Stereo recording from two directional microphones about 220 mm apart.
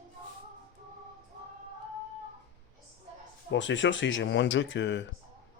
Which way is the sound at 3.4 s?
55° left (ahead or behind).